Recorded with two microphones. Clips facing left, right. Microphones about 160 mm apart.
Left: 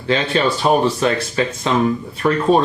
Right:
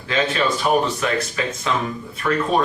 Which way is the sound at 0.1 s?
30° left (ahead or behind).